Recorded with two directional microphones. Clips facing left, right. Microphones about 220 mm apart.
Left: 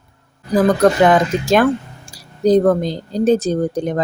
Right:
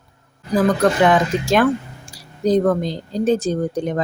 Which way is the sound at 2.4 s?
35° left (ahead or behind).